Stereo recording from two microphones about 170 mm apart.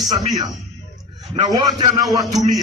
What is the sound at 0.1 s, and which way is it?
A man's voice, 20° right (ahead or behind).